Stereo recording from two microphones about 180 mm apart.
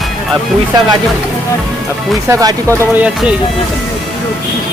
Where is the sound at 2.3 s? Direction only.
20° right (ahead or behind).